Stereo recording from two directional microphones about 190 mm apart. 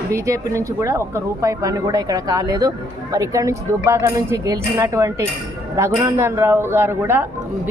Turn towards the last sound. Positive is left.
turn(degrees=-10)  # may be behind; listen again after turning